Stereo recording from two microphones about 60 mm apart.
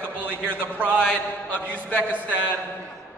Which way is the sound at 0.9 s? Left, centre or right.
Centre.